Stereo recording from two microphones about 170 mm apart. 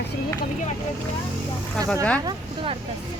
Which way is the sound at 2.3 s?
30° right (ahead or behind).